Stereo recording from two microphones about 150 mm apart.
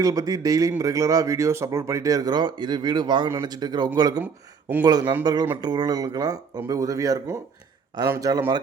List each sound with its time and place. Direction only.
0.0 s speech: 25° right (ahead or behind)